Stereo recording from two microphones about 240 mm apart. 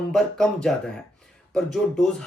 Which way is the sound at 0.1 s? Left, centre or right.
Centre.